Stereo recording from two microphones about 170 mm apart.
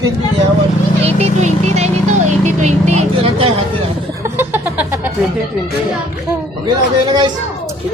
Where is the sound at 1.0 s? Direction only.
40° right (ahead or behind).